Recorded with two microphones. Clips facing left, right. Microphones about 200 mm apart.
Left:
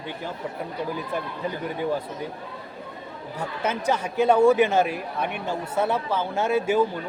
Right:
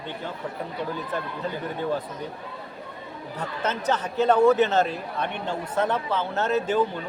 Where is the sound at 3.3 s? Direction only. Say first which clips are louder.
Left 1 dB; 10° left (ahead or behind).